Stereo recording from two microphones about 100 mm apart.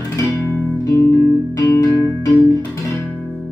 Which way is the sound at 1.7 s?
30° left (ahead or behind).